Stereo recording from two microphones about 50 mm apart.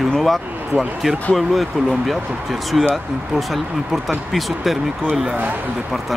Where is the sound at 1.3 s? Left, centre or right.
Centre.